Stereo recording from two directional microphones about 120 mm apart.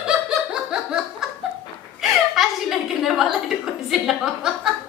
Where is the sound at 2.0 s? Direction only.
Centre (ahead or behind).